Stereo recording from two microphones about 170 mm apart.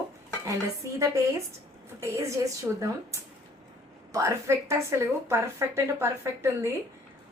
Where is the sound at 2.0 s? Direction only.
15° right (ahead or behind).